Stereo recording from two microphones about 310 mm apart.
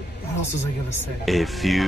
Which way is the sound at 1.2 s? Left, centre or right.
Centre.